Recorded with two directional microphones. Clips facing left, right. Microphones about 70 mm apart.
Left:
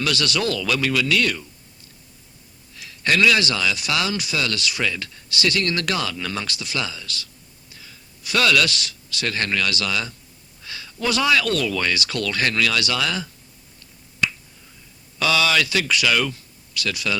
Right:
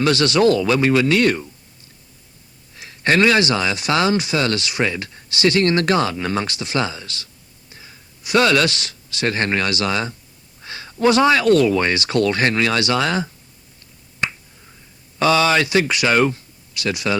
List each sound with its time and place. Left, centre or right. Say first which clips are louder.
0.0 s speech: right 8 dB; right
2.7 s speech: right 4 dB; right
14.2 s finger snapping: even; right
15.2 s speech: right 4 dB; right